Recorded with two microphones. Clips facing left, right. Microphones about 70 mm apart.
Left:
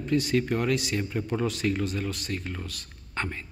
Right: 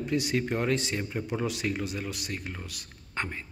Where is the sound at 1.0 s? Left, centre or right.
Centre.